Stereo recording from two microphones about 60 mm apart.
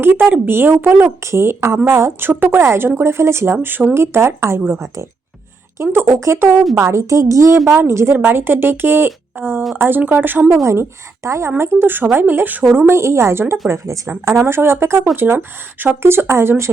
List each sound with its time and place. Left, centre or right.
0.0 s a woman's voice: right
6.7 s a woman's voice: right
10.5 s a woman's voice: right
12.7 s a woman's voice: right
13.7 s speech: right
14.3 s speech: right